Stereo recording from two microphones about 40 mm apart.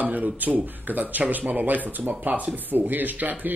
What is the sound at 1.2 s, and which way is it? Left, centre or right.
Speech, right.